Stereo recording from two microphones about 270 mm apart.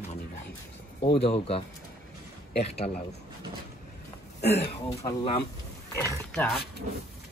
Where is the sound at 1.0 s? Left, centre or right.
Left.